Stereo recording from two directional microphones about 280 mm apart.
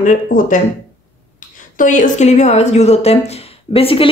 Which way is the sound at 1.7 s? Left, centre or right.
Left.